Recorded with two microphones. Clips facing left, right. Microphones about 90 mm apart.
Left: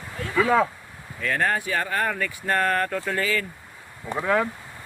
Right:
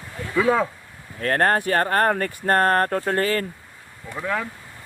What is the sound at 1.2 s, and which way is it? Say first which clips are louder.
Speech: right 4 dB; 50° right (ahead or behind).